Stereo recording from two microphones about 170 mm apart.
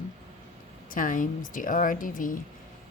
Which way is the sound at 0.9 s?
50° left (ahead or behind).